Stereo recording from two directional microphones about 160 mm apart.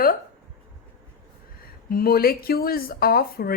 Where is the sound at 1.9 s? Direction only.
70° left (ahead or behind).